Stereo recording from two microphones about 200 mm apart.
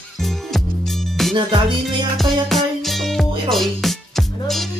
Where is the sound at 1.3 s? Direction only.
25° right (ahead or behind).